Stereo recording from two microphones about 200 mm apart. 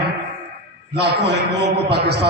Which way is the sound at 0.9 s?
55° right (ahead or behind).